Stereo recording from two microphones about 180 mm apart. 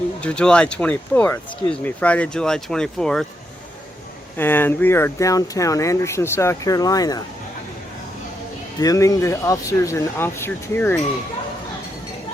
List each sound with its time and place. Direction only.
0.2 s speech: 5° left (ahead or behind)
4.4 s speech: 10° left (ahead or behind)
8.8 s speech: 20° left (ahead or behind)